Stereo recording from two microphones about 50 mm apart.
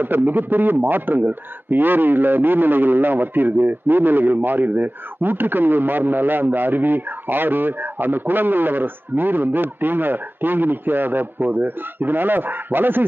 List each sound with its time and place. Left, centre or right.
0.0 s a man's voice: right